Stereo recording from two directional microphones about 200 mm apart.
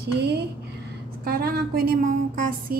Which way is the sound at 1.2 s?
50° right (ahead or behind).